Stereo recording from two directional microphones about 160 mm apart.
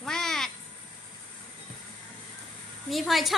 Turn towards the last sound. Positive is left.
turn(degrees=0)  # may be behind; listen again after turning